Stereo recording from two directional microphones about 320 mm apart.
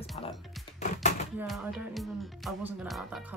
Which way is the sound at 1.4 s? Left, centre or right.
Centre.